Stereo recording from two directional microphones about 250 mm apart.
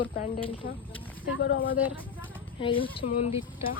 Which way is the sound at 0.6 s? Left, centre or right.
Left.